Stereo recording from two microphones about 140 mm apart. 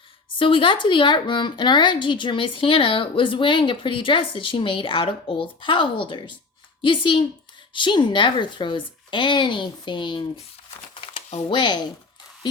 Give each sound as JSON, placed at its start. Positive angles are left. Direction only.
{"t": 0.3, "sound": "speech", "side_deg": 40}
{"t": 11.4, "sound": "speech", "side_deg": 35}